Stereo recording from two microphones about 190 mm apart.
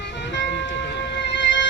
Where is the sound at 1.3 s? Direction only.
70° left (ahead or behind).